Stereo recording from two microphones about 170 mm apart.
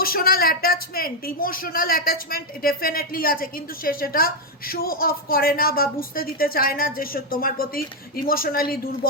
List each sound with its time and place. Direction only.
0.0 s speech: 60° left (ahead or behind)